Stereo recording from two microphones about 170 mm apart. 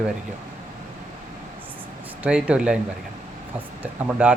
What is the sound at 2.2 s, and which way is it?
Speech, 5° right (ahead or behind).